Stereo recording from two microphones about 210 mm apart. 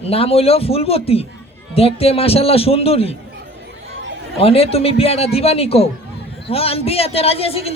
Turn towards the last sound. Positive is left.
turn(degrees=30)  # may be behind; listen again after turning